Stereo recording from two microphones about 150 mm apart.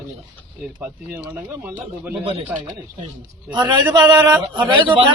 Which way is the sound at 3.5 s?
30° right (ahead or behind).